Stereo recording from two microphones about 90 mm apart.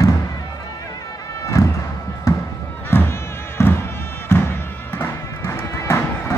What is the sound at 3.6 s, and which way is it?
Music, 30° left (ahead or behind).